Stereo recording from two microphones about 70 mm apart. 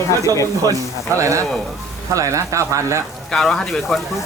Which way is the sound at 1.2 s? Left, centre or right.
Right.